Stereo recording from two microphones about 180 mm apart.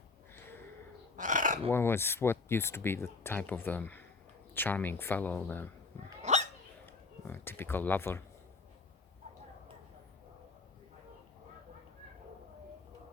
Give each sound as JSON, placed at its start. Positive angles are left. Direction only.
{"t": 1.1, "sound": "bird", "side_deg": -45}
{"t": 1.7, "sound": "speech", "side_deg": 15}
{"t": 6.3, "sound": "dog", "side_deg": -40}
{"t": 6.8, "sound": "speech", "side_deg": 10}